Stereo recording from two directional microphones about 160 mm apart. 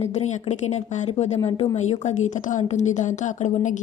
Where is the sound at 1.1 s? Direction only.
40° left (ahead or behind).